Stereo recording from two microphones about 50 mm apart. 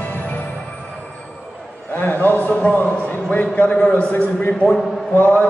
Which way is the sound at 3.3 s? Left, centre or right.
Left.